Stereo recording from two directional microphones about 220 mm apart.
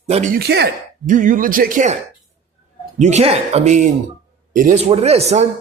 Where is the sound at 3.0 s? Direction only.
30° right (ahead or behind).